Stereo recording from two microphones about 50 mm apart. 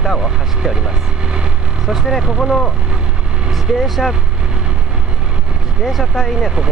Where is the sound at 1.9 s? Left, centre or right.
Centre.